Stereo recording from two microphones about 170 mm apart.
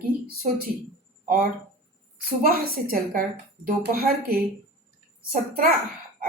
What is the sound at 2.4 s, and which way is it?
Speech, 60° right (ahead or behind).